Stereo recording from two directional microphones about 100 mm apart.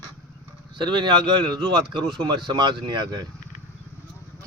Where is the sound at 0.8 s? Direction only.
50° right (ahead or behind).